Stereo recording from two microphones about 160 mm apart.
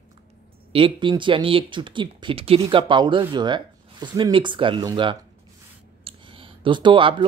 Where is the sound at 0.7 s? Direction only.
30° right (ahead or behind).